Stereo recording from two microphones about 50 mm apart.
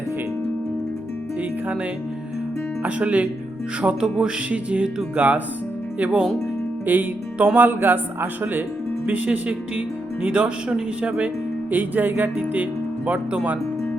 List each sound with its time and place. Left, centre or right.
1.4 s music: right
2.8 s speech: right
9.0 s speech: right
11.7 s speech: right